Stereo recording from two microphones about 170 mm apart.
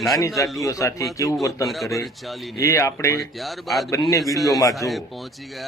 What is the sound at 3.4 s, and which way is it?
Speech, centre (ahead or behind).